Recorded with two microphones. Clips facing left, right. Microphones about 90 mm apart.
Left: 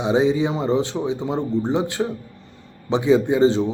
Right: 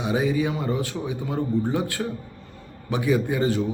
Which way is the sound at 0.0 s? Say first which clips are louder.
Left 5 dB; 25° left (ahead or behind).